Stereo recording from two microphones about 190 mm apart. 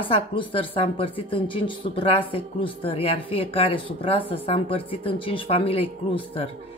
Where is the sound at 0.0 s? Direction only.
25° left (ahead or behind).